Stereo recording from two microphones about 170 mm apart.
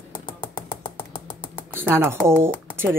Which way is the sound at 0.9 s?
30° left (ahead or behind).